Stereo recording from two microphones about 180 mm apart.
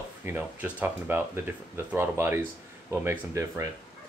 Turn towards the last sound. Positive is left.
turn(degrees=-15)  # may be behind; listen again after turning